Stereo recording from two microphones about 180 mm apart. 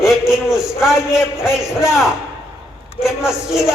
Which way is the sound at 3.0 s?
5° right (ahead or behind).